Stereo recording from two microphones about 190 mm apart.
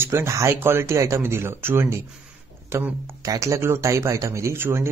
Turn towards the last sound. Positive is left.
turn(degrees=-10)  # may be behind; listen again after turning